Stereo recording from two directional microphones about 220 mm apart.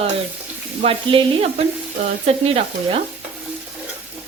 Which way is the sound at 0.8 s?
25° right (ahead or behind).